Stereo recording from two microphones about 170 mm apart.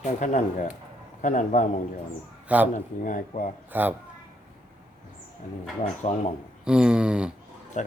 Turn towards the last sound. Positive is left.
turn(degrees=-5)  # may be behind; listen again after turning